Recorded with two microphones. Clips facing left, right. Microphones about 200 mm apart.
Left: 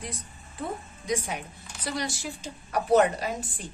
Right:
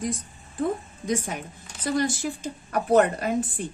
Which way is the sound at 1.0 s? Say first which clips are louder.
Right 2 dB; 50° right (ahead or behind).